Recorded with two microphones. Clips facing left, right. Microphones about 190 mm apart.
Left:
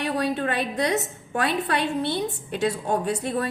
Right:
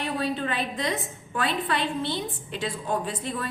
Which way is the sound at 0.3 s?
50° left (ahead or behind).